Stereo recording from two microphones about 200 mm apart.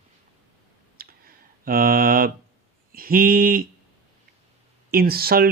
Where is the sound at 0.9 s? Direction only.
45° right (ahead or behind).